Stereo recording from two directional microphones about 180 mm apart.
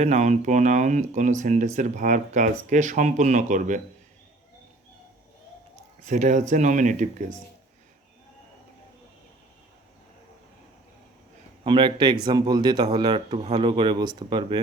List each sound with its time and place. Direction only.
0.0 s speech: 40° right (ahead or behind)
6.1 s speech: 45° right (ahead or behind)
11.6 s speech: 25° right (ahead or behind)